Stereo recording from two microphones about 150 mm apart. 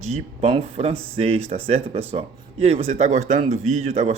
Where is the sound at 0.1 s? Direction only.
45° right (ahead or behind).